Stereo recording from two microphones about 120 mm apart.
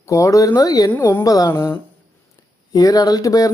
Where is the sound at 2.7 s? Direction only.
30° left (ahead or behind).